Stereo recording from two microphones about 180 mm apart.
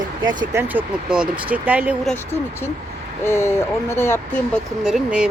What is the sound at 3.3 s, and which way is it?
Speech, 15° left (ahead or behind).